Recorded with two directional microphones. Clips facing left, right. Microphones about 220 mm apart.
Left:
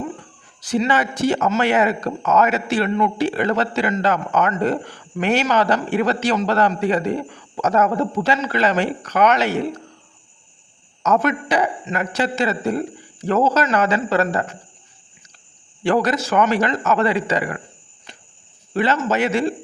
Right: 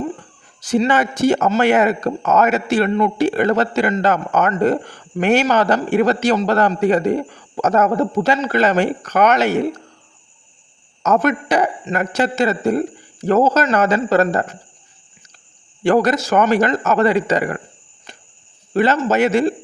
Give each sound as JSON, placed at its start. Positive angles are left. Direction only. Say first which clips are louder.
{"t": 0.6, "sound": "speech", "louder": "right 3 dB", "side_deg": -45}
{"t": 11.0, "sound": "speech", "louder": "right 2 dB", "side_deg": -45}
{"t": 15.8, "sound": "speech", "louder": "right 4 dB", "side_deg": -45}
{"t": 18.7, "sound": "a man's voice", "louder": "right 4 dB", "side_deg": -45}